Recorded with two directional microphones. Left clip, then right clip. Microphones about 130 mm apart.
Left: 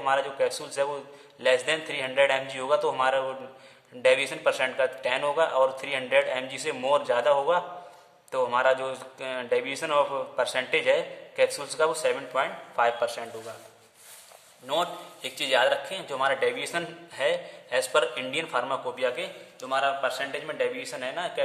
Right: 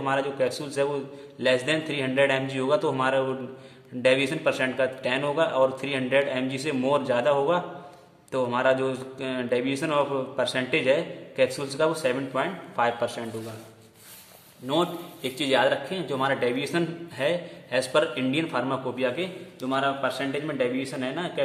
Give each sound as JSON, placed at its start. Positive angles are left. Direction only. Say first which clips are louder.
{"t": 0.0, "sound": "a man's voice", "louder": "even", "side_deg": 25}
{"t": 12.7, "sound": "a man's voice", "louder": "left 1 dB", "side_deg": 10}
{"t": 14.7, "sound": "a man's voice", "louder": "right 2 dB", "side_deg": 10}